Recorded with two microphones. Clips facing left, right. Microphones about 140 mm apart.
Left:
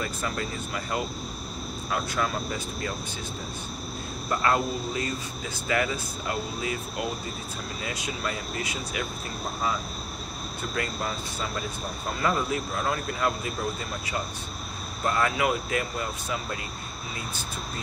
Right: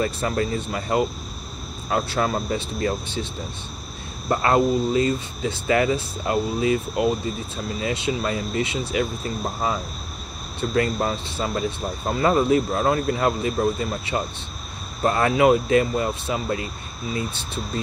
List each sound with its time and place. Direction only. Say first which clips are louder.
0.0 s speech: right 8 dB; 40° right (ahead or behind)
0.7 s speech: right 8 dB; 30° right (ahead or behind)
4.4 s speech: right 7 dB; 25° right (ahead or behind)
10.6 s speech: right 10 dB; 35° right (ahead or behind)
15.0 s speech: right 8 dB; 35° right (ahead or behind)